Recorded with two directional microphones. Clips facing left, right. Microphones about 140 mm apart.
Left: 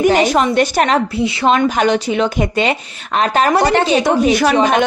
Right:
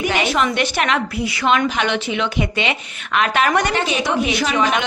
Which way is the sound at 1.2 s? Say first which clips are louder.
Left 6 dB; 25° left (ahead or behind).